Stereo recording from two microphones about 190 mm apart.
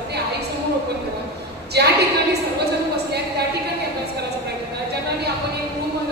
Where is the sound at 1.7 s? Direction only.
60° right (ahead or behind).